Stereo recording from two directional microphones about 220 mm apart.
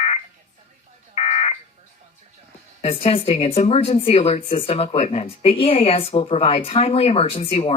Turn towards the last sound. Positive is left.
turn(degrees=25)  # may be behind; listen again after turning